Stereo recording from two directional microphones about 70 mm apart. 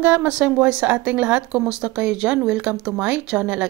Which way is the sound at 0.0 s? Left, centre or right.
Right.